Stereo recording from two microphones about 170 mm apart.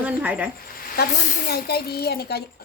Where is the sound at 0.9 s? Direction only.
65° left (ahead or behind).